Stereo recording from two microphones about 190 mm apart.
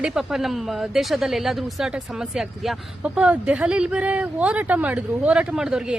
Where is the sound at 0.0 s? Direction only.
5° right (ahead or behind).